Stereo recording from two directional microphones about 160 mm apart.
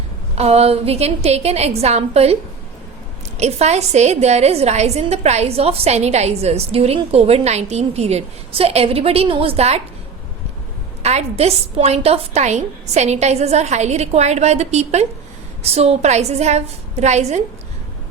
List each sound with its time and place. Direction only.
0.3 s a woman's voice: 40° right (ahead or behind)
11.0 s a woman's voice: 40° right (ahead or behind)